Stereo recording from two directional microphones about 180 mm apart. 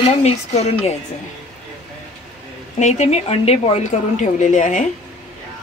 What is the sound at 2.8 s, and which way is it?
Speech, 40° left (ahead or behind).